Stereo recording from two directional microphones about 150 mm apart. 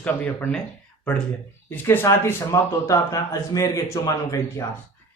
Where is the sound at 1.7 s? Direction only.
15° left (ahead or behind).